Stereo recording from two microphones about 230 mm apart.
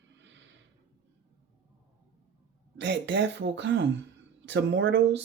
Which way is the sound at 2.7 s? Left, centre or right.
Right.